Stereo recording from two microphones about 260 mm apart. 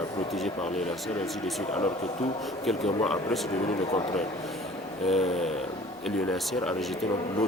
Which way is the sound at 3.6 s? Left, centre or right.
Left.